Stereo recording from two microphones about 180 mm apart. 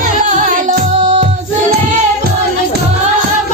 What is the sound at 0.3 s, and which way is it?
Music, 40° right (ahead or behind).